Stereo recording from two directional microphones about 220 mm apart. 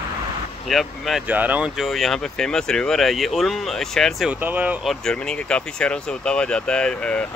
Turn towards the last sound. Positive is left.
turn(degrees=5)  # may be behind; listen again after turning